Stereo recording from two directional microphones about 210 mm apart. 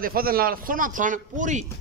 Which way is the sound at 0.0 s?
45° right (ahead or behind).